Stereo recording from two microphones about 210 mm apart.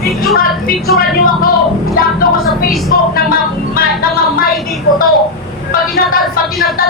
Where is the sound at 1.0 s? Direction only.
40° left (ahead or behind).